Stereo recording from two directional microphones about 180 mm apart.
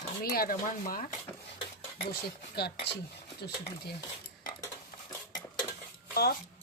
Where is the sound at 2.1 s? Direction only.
65° left (ahead or behind).